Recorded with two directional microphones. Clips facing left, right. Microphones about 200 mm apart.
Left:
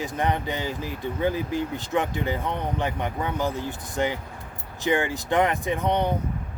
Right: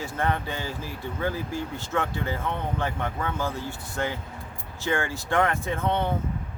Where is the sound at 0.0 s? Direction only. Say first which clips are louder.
Left 2 dB; 15° left (ahead or behind).